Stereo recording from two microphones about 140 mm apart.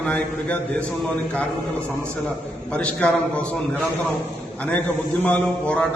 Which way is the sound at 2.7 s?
10° left (ahead or behind).